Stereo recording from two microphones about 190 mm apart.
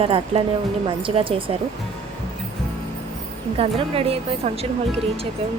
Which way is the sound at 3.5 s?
30° right (ahead or behind).